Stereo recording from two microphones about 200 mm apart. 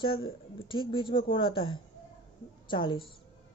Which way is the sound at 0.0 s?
25° left (ahead or behind).